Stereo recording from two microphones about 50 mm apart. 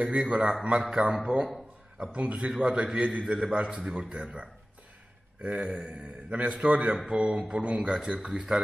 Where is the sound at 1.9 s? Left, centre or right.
Right.